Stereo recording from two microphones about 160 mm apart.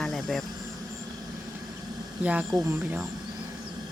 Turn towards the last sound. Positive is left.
turn(degrees=-10)  # may be behind; listen again after turning